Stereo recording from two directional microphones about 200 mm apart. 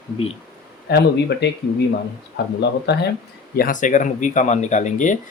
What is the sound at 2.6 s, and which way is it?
Speech, 55° left (ahead or behind).